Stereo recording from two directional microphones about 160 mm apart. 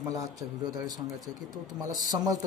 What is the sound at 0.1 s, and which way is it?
Speech, 20° right (ahead or behind).